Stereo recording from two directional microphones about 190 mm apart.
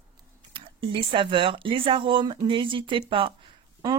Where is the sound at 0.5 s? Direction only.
25° right (ahead or behind).